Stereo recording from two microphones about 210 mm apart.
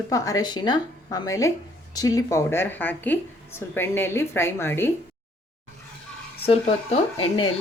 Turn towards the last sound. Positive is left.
turn(degrees=25)  # may be behind; listen again after turning